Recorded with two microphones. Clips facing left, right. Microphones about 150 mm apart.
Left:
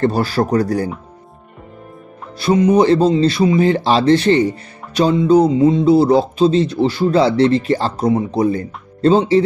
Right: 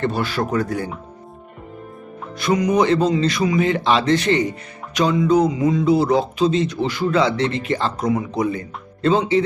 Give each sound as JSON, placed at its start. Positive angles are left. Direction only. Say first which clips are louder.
{"t": 0.0, "sound": "speech", "louder": "left 5 dB", "side_deg": 35}
{"t": 2.3, "sound": "speech", "louder": "left 5 dB", "side_deg": 30}